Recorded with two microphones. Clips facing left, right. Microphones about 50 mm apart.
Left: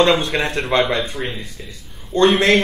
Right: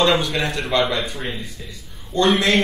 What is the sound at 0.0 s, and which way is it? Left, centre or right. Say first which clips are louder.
Speech: left 2 dB; left.